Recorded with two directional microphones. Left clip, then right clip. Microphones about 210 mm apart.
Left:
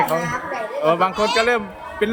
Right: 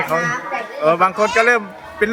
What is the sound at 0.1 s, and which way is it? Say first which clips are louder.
Speech: right 3 dB; 20° left (ahead or behind).